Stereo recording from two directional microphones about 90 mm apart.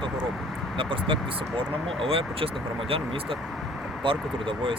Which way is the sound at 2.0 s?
90° right.